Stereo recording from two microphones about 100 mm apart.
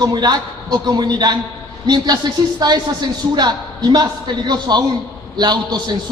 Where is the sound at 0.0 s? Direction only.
45° right (ahead or behind).